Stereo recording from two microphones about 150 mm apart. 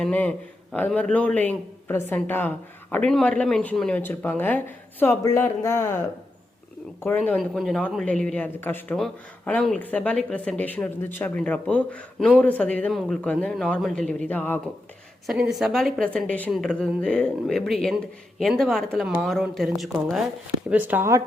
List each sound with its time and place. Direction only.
0.0 s speech: 10° left (ahead or behind)
7.3 s speech: centre (ahead or behind)
15.3 s speech: 5° right (ahead or behind)
20.7 s speech: 10° right (ahead or behind)